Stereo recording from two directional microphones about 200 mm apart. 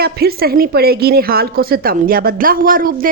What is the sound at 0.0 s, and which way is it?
A woman's voice, 50° right (ahead or behind).